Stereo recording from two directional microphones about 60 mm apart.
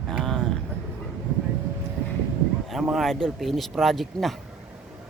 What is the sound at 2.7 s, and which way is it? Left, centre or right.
Speech, centre.